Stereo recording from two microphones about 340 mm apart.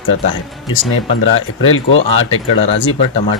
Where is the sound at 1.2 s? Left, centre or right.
Left.